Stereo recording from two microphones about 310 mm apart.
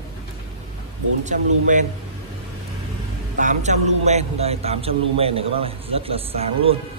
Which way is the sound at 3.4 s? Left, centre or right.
Right.